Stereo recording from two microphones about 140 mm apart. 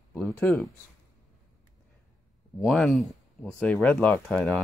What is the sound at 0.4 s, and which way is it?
Speech, centre (ahead or behind).